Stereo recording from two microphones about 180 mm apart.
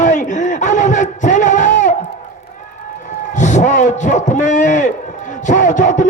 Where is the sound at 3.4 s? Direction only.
45° left (ahead or behind).